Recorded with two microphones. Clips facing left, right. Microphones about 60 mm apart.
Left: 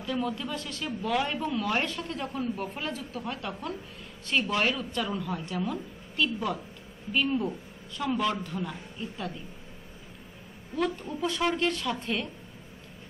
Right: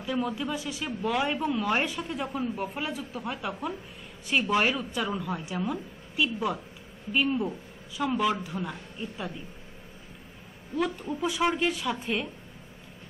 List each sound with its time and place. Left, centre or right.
0.0 s a woman's voice: centre
10.8 s speech: centre